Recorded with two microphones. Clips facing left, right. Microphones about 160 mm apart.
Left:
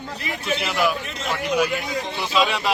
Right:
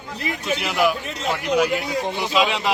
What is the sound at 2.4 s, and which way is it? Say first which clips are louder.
Speech: right 1 dB; 20° right (ahead or behind).